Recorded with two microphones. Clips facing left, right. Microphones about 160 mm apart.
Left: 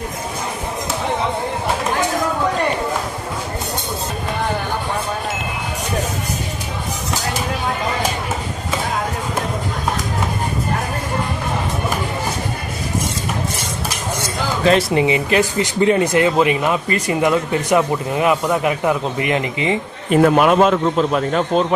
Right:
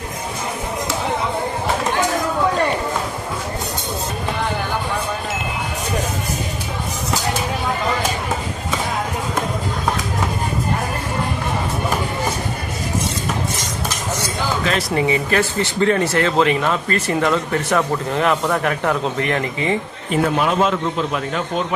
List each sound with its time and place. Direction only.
14.6 s speech: 30° left (ahead or behind); by 19.7 s 15° left (ahead or behind)
20.3 s a man's voice: 60° left (ahead or behind); by 21.6 s 40° left (ahead or behind)